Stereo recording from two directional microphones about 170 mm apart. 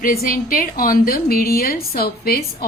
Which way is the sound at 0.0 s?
60° left (ahead or behind).